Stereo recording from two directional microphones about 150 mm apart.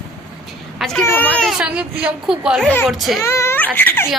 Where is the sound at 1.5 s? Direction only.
10° right (ahead or behind).